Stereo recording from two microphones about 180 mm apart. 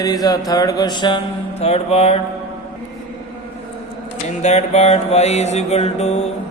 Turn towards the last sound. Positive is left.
turn(degrees=35)  # may be behind; listen again after turning